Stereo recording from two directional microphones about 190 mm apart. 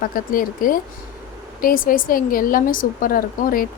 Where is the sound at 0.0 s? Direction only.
45° left (ahead or behind).